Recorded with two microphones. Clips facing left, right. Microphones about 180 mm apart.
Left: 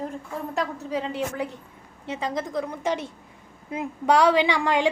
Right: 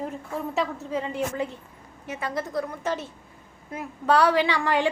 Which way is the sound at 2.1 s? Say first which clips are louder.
Left 2 dB; 20° left (ahead or behind).